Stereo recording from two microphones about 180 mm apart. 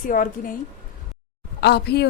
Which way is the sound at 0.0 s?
50° left (ahead or behind).